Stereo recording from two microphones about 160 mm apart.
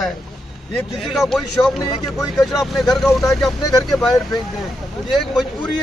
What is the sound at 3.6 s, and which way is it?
Speech, 20° left (ahead or behind).